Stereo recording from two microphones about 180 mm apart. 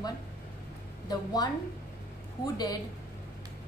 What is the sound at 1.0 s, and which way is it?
Speech, 20° left (ahead or behind).